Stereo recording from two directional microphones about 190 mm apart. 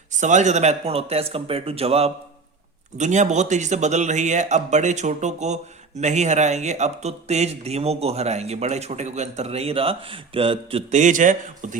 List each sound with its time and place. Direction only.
0.1 s speech: 40° right (ahead or behind)